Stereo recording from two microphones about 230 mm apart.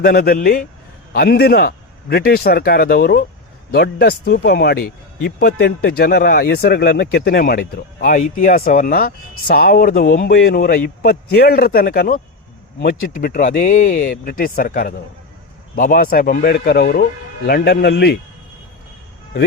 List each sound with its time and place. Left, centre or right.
0.0 s a man's voice: left